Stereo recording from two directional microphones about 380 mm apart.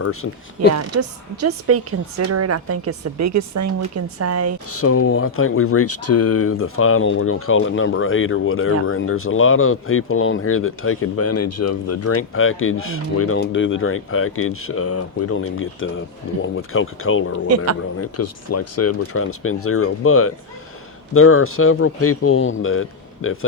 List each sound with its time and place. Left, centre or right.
0.0 s speech: left
0.8 s a woman's voice: right
4.7 s speech: left